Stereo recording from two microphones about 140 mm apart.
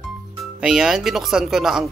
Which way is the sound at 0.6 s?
5° right (ahead or behind).